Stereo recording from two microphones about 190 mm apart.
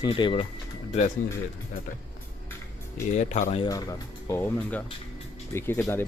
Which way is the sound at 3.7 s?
20° left (ahead or behind).